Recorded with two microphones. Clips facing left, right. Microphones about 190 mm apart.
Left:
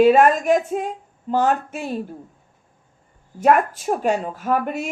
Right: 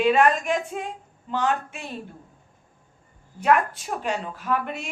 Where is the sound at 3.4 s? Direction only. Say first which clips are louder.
Left 4 dB; 45° left (ahead or behind).